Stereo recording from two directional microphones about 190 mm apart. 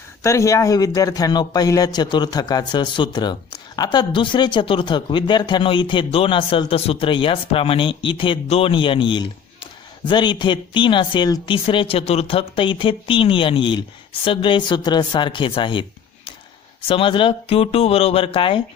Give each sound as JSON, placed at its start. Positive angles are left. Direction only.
{"t": 0.2, "sound": "speech", "side_deg": 15}